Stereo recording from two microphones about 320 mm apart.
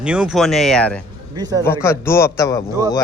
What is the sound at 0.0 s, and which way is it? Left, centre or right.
Speech, centre.